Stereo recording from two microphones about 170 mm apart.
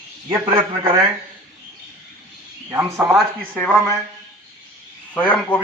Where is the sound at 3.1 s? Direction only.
5° left (ahead or behind).